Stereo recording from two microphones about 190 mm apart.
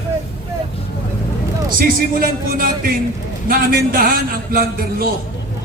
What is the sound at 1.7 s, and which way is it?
Speech, 50° right (ahead or behind).